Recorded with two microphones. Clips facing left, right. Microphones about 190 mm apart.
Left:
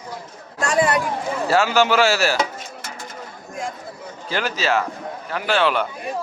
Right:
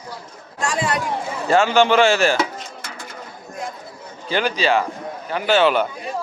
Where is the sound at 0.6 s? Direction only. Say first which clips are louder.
Left 4 dB; 55° left (ahead or behind).